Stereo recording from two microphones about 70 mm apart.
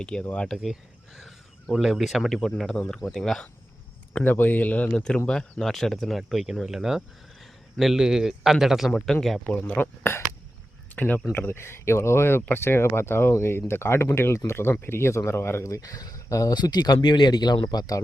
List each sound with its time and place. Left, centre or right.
0.0 s speech: centre
0.5 s a man's voice: centre
4.2 s a man's voice: left; by 9.1 s centre
9.4 s speech: left
10.9 s speech: left
11.3 s speech: left
15.8 s speech: left